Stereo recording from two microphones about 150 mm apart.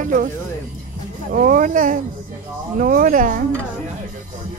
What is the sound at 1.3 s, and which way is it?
Speech, 65° right (ahead or behind).